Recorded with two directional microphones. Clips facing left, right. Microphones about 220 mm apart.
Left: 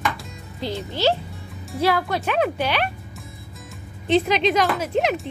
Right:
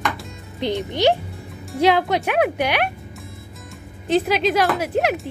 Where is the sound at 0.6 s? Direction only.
20° right (ahead or behind).